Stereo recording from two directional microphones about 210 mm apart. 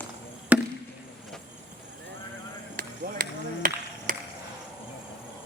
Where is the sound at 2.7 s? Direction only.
40° right (ahead or behind).